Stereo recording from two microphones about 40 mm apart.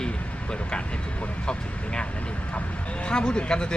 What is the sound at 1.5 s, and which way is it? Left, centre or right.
Speech, left.